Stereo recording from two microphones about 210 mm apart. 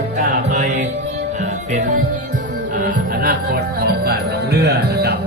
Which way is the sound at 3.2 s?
50° right (ahead or behind).